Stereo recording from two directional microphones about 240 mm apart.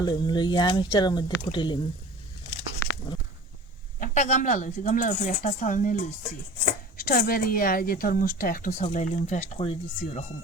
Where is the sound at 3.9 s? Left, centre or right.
Left.